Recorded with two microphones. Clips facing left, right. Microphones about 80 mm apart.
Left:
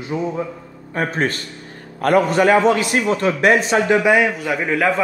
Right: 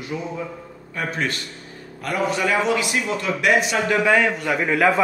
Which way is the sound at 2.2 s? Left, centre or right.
Left.